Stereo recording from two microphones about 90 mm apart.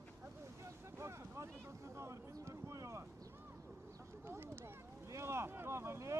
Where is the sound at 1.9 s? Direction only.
30° right (ahead or behind).